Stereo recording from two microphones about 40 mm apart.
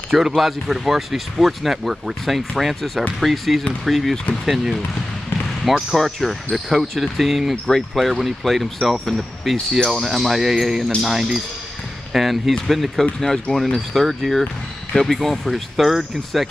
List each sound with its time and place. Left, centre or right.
0.1 s speech: centre
5.7 s speech: centre
5.9 s speech: centre
14.9 s speech: left
15.4 s speech: centre